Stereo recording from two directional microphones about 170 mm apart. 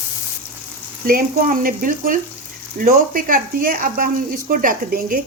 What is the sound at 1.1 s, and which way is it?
A woman's voice, 55° right (ahead or behind).